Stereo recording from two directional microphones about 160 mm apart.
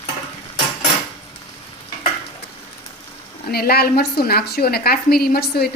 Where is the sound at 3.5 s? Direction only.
75° left (ahead or behind).